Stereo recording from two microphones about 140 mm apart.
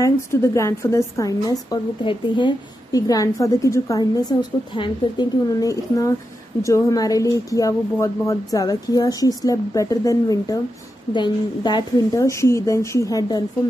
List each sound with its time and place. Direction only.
0.0 s a woman's voice: 20° left (ahead or behind)